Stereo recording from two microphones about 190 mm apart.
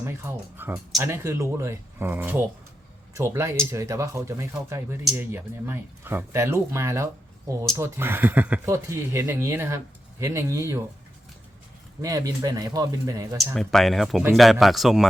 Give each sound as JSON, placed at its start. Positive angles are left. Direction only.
{"t": 0.0, "sound": "speech", "side_deg": -15}
{"t": 12.0, "sound": "speech", "side_deg": -15}
{"t": 13.4, "sound": "speech", "side_deg": 0}